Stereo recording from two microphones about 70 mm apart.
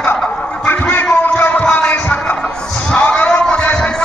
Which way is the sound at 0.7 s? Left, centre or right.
Left.